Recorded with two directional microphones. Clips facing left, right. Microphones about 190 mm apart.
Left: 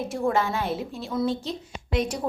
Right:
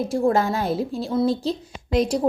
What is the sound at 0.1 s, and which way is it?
Speech, 40° right (ahead or behind).